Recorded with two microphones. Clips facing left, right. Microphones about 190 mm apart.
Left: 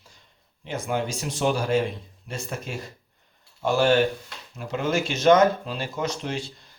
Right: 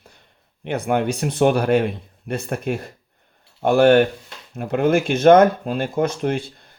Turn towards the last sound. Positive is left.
turn(degrees=-55)  # may be behind; listen again after turning